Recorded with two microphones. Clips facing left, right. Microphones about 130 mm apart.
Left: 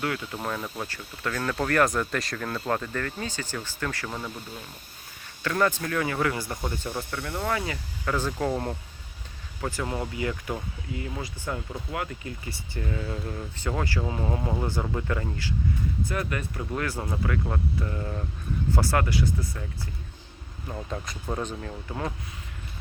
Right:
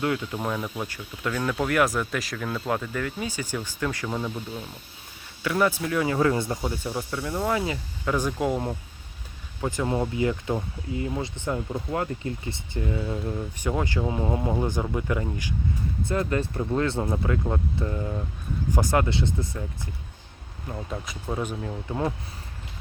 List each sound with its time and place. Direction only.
0.0 s speech: 15° right (ahead or behind)
5.4 s speech: 10° right (ahead or behind)
6.1 s speech: 25° right (ahead or behind)
6.6 s speech: 10° right (ahead or behind)
7.4 s speech: 25° right (ahead or behind)
16.0 s speech: 25° right (ahead or behind)
20.7 s speech: centre (ahead or behind)
21.6 s speech: 15° right (ahead or behind)